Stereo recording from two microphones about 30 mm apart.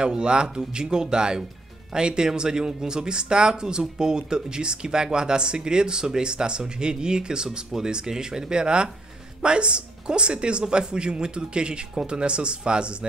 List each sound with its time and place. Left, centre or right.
0.0 s speech: right